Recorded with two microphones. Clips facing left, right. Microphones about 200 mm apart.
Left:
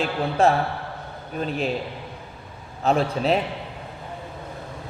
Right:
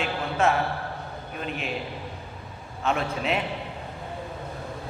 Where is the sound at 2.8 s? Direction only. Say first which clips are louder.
Left 5 dB; 35° left (ahead or behind).